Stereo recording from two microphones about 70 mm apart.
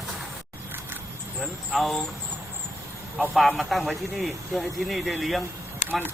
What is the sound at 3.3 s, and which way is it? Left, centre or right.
Speech, centre.